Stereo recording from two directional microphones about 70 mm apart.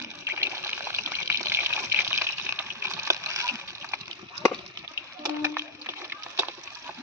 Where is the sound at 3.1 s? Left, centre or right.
Right.